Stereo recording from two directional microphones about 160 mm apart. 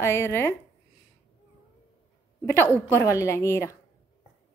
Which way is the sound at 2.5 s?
15° left (ahead or behind).